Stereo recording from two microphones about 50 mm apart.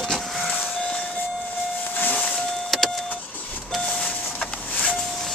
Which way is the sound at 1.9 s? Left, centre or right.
Left.